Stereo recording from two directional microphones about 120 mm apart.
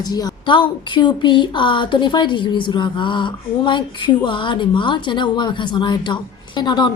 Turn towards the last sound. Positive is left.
turn(degrees=35)  # may be behind; listen again after turning